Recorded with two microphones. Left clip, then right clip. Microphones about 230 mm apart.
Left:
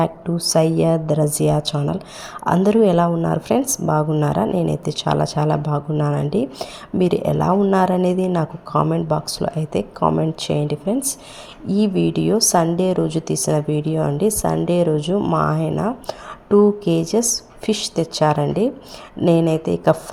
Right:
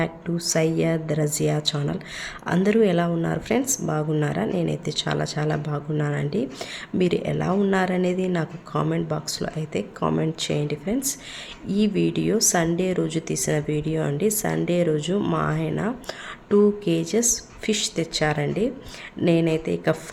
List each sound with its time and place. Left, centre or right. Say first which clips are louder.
0.0 s a woman's voice: left 6 dB; centre